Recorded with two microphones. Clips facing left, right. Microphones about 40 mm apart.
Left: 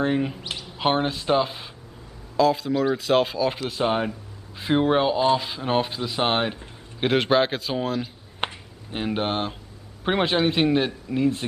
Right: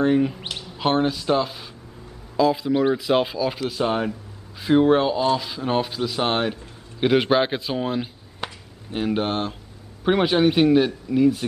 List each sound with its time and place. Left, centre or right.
0.0 s speech: centre
2.3 s a man's voice: centre
3.4 s speech: centre
7.2 s a man's voice: centre
8.4 s a sound: left
8.9 s speech: centre